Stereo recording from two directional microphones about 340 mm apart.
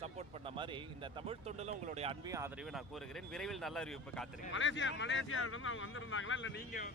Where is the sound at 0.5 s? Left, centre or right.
Centre.